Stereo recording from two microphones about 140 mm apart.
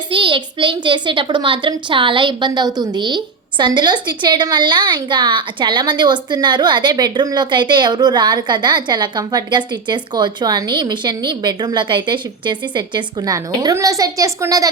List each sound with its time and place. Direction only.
0.1 s a child's voice: 35° right (ahead or behind)